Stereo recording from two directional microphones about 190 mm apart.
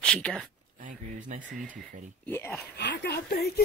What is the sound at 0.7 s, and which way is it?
Speech, 45° right (ahead or behind).